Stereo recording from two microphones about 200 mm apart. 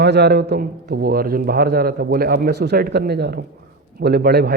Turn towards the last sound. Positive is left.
turn(degrees=-55)  # may be behind; listen again after turning